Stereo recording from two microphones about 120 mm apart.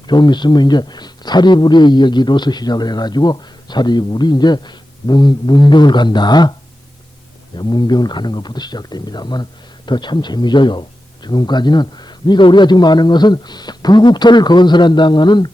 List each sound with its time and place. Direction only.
0.1 s speech: 40° left (ahead or behind)
7.5 s speech: 35° left (ahead or behind)